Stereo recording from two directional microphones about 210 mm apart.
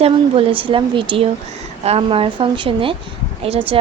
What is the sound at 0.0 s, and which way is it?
Speech, 25° right (ahead or behind).